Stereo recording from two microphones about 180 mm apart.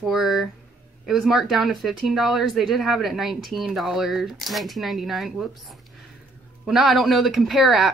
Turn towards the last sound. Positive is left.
turn(degrees=0)  # may be behind; listen again after turning